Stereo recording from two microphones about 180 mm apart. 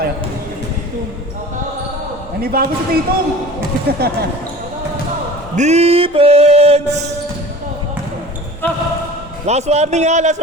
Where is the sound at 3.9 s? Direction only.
60° right (ahead or behind).